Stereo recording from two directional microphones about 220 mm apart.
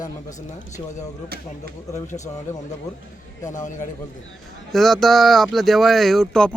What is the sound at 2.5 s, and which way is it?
Speech, 35° left (ahead or behind).